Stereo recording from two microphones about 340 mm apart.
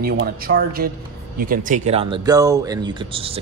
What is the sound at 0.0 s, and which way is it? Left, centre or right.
Speech, right.